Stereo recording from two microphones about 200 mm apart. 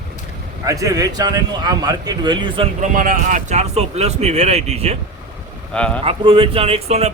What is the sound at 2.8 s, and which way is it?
Speech, 45° right (ahead or behind).